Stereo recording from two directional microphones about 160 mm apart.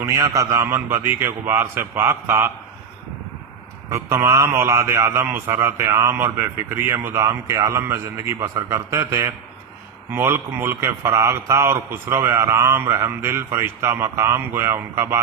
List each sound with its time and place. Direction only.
0.0 s speech: 20° right (ahead or behind)
3.8 s speech: 20° right (ahead or behind)